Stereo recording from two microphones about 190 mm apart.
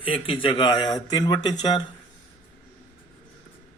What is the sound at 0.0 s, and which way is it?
Speech, 25° left (ahead or behind).